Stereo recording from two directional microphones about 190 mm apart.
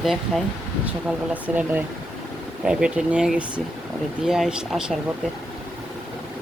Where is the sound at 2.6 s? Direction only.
5° right (ahead or behind).